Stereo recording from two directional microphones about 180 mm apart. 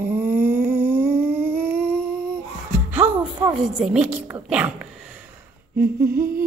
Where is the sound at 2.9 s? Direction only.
10° right (ahead or behind).